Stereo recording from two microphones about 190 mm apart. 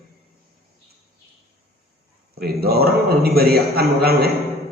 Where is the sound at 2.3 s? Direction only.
55° right (ahead or behind).